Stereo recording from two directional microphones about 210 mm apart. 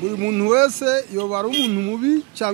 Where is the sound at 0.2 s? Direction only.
10° right (ahead or behind).